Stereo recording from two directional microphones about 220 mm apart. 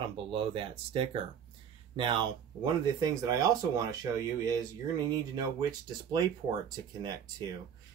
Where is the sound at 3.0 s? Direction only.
15° right (ahead or behind).